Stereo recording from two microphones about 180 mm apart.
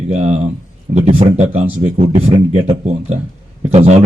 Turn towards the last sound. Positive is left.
turn(degrees=-35)  # may be behind; listen again after turning